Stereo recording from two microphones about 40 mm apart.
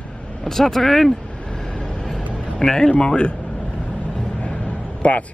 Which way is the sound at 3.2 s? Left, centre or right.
Left.